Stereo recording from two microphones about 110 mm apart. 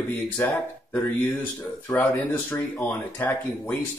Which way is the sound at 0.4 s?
25° left (ahead or behind).